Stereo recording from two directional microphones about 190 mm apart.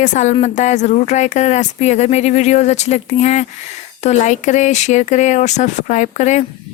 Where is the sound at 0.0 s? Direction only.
40° left (ahead or behind).